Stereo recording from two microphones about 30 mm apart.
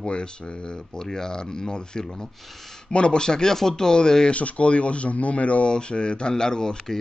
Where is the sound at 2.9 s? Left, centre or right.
Left.